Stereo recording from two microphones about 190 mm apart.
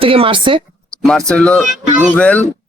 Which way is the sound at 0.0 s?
30° right (ahead or behind).